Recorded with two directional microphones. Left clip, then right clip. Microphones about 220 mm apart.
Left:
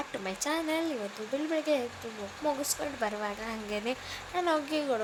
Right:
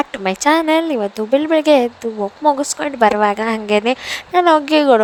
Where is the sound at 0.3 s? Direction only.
40° right (ahead or behind).